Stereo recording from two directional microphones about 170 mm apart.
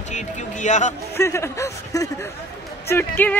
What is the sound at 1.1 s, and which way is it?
Speech, 15° left (ahead or behind).